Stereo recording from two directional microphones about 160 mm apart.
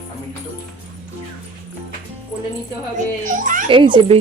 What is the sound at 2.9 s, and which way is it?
Speech, 55° right (ahead or behind).